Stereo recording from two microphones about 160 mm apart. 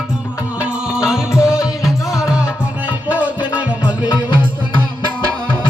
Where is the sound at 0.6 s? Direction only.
5° right (ahead or behind).